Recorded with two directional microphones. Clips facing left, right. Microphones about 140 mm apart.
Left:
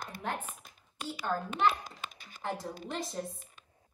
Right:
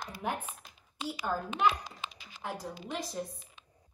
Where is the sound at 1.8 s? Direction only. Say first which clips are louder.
Right 1 dB; 50° left (ahead or behind).